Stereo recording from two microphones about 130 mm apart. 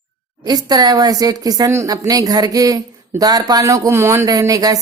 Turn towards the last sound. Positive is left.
turn(degrees=-30)  # may be behind; listen again after turning